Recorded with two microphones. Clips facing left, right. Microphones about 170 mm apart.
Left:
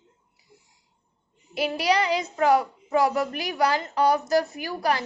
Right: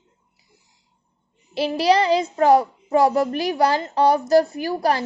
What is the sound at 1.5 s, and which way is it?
A child's voice, 30° right (ahead or behind).